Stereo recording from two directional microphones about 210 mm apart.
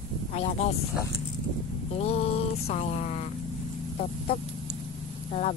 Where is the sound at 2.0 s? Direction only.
30° left (ahead or behind).